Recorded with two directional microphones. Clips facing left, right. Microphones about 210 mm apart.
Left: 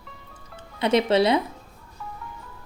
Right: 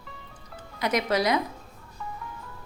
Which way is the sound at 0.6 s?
30° left (ahead or behind).